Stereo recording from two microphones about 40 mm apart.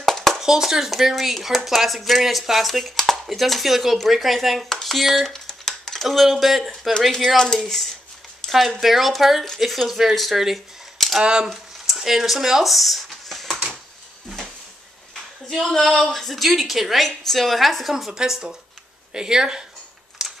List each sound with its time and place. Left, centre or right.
0.0 s a sound: centre
0.4 s speech: centre
4.6 s a sound: centre
4.9 s speech: centre
5.7 s computer keyboard: centre
6.0 s speech: centre
7.3 s speech: centre
8.5 s speech: centre
11.4 s a sound: centre
15.5 s speech: centre
17.0 s speech: centre
17.9 s a woman's voice: centre
20.2 s a sound: centre